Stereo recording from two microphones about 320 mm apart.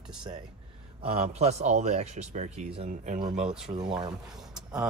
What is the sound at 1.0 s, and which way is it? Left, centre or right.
Speech, centre.